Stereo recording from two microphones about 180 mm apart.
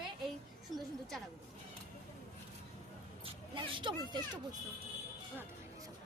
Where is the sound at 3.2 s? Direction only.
25° right (ahead or behind).